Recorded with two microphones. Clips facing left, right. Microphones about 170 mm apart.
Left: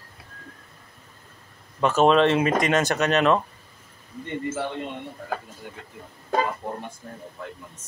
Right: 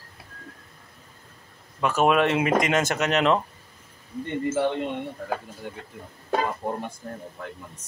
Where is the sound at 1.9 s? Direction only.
10° right (ahead or behind).